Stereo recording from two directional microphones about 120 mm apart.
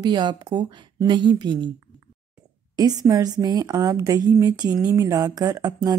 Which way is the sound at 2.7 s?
30° right (ahead or behind).